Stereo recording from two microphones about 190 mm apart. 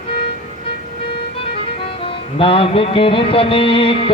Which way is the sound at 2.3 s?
30° left (ahead or behind).